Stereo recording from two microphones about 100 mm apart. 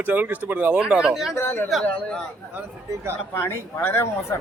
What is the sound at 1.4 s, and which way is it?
Speech, 20° left (ahead or behind).